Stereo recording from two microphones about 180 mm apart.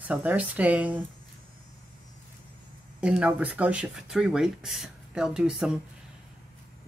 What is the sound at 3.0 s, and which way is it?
Speech, 5° right (ahead or behind).